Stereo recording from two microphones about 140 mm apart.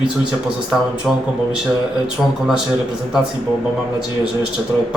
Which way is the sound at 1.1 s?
Centre (ahead or behind).